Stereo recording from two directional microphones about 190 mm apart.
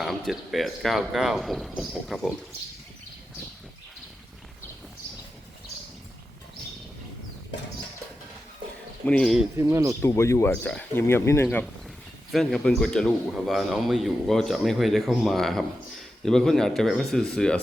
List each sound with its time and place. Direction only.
0.3 s speech: centre (ahead or behind)
9.0 s speech: 5° left (ahead or behind)
9.6 s speech: 15° right (ahead or behind)
10.0 s speech: 15° left (ahead or behind)
11.4 s speech: centre (ahead or behind)